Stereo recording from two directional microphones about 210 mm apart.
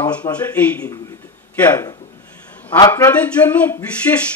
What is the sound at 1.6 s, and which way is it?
Speech, 10° left (ahead or behind).